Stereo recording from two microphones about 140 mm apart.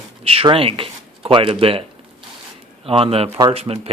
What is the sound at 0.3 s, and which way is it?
Speech, 40° right (ahead or behind).